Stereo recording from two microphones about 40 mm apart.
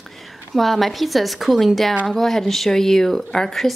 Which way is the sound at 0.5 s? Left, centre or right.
Centre.